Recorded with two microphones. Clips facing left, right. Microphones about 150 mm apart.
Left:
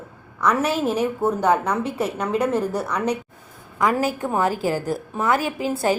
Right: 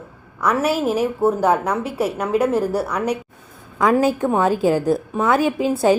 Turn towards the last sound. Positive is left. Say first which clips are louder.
# right 5 dB
turn(degrees=-20)  # may be behind; listen again after turning